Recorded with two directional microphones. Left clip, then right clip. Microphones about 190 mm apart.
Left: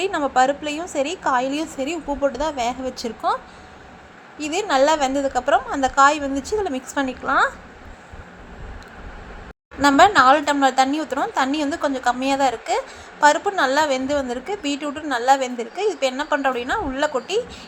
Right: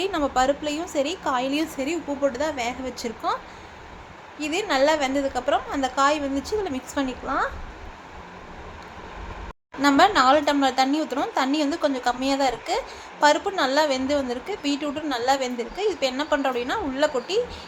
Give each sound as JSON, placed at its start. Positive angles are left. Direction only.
{"t": 0.0, "sound": "a woman's voice", "side_deg": 15}
{"t": 4.4, "sound": "a woman's voice", "side_deg": 15}
{"t": 9.8, "sound": "a woman's voice", "side_deg": 20}